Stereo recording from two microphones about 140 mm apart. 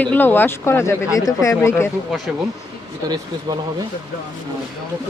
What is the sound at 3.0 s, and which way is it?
Speech, 30° right (ahead or behind).